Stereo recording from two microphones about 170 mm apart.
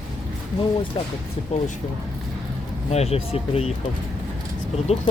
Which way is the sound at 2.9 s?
40° left (ahead or behind).